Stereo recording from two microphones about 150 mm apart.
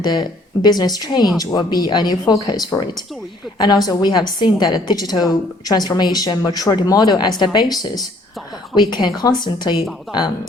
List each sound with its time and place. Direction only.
0.0 s a woman's voice: 30° left (ahead or behind)